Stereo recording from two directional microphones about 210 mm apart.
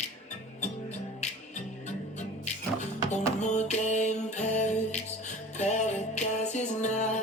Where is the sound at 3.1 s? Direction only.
35° left (ahead or behind).